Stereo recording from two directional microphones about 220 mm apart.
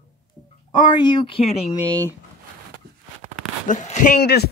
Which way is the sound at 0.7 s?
20° left (ahead or behind).